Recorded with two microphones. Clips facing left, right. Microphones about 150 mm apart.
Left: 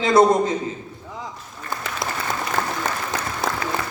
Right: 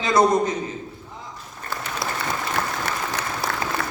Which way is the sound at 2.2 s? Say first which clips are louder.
Left 1 dB; 70° right (ahead or behind).